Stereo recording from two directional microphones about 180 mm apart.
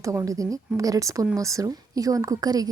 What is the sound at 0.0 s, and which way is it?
A woman's voice, 15° right (ahead or behind).